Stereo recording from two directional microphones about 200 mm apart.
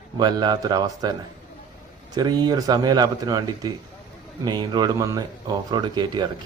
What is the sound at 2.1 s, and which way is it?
A man's voice, 20° right (ahead or behind).